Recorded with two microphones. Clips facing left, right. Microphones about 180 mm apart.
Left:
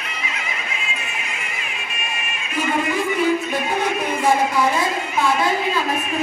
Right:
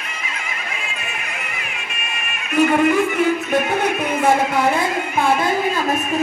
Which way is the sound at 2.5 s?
65° right (ahead or behind).